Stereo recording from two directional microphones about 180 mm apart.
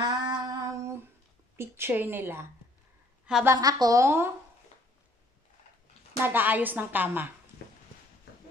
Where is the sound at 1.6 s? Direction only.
15° right (ahead or behind).